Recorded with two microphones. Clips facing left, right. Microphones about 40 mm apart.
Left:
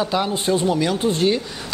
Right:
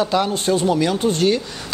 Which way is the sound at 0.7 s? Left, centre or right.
Centre.